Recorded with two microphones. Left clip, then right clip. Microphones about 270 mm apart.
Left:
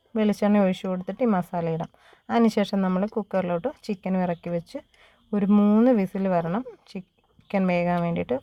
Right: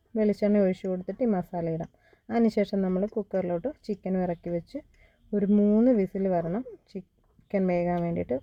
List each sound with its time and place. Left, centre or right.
0.1 s speech: left